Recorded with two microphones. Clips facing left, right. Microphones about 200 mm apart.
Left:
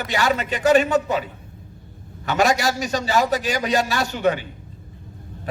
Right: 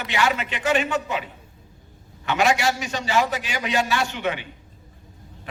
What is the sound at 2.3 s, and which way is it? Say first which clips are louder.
A man's voice: left 1 dB; 40° left (ahead or behind).